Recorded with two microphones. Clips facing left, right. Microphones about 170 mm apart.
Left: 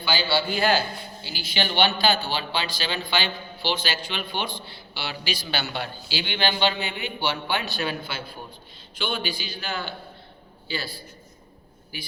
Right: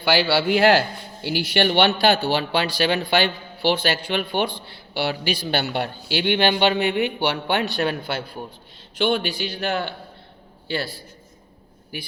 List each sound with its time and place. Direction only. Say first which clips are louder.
0.0 s a man's voice: right 6 dB; 75° right (ahead or behind); by 12.1 s 60° right (ahead or behind)